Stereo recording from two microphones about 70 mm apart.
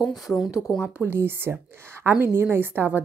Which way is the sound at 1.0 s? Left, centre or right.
Right.